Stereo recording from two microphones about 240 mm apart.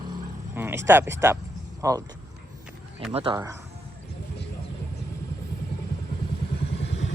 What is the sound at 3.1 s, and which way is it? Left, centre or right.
Speech, right.